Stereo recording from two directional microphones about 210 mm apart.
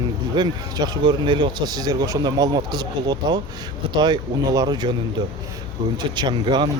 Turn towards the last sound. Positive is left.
turn(degrees=-20)  # may be behind; listen again after turning